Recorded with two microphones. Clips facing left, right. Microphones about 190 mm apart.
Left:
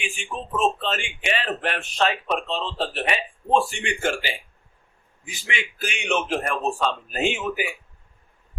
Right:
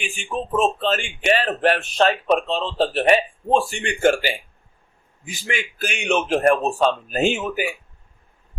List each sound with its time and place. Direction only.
0.8 s a man's voice: 40° right (ahead or behind)